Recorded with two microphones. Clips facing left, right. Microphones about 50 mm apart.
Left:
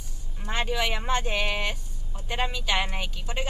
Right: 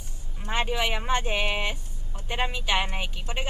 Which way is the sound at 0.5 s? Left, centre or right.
Centre.